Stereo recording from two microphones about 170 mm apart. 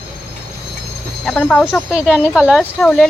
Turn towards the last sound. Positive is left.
turn(degrees=5)  # may be behind; listen again after turning